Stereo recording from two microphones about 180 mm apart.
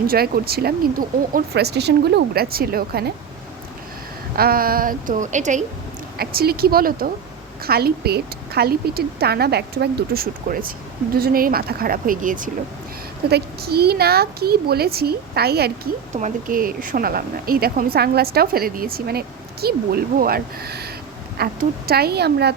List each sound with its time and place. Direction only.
0.1 s a woman's voice: 60° right (ahead or behind)
4.4 s a woman's voice: 55° right (ahead or behind)
6.1 s a woman's voice: 55° right (ahead or behind)
13.3 s a woman's voice: 60° right (ahead or behind)
16.1 s a woman's voice: 45° right (ahead or behind); by 22.5 s 65° right (ahead or behind)